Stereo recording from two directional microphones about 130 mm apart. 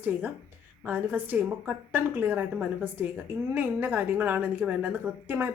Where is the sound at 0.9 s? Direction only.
15° right (ahead or behind).